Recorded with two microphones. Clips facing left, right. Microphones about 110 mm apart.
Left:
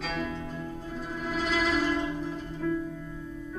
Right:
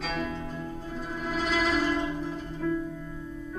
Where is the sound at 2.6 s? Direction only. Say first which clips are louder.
Right 1 dB; 15° right (ahead or behind).